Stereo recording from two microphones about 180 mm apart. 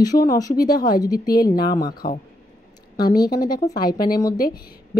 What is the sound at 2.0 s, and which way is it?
Speech, 55° left (ahead or behind).